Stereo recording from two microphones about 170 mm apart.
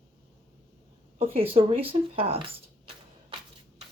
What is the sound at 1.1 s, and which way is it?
Speech, 35° right (ahead or behind).